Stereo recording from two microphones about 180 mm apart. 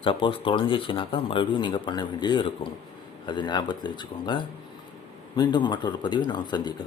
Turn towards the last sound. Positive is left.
turn(degrees=25)  # may be behind; listen again after turning